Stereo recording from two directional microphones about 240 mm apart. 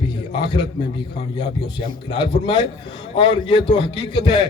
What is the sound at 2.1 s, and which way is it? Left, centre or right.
A man's voice, left.